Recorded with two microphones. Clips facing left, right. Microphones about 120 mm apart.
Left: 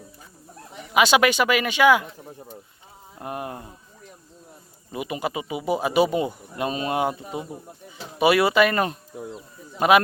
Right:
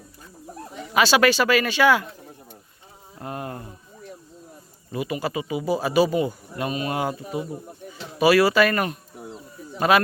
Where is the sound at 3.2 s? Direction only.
15° left (ahead or behind).